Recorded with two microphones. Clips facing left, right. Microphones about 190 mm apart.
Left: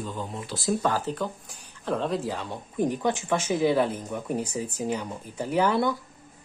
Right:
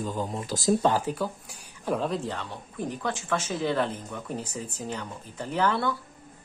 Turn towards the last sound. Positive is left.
turn(degrees=10)  # may be behind; listen again after turning